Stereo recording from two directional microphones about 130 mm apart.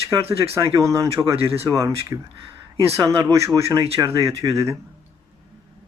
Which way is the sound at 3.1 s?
25° right (ahead or behind).